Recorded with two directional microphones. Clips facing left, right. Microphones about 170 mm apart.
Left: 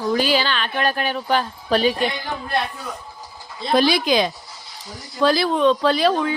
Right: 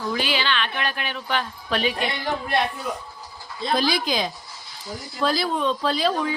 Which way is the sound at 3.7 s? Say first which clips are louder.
Left 6 dB; 70° left (ahead or behind).